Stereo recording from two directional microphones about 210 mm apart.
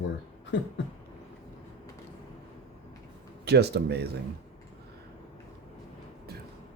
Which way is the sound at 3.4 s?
50° right (ahead or behind).